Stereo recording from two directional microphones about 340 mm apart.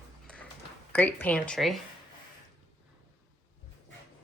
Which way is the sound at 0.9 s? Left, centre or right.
Centre.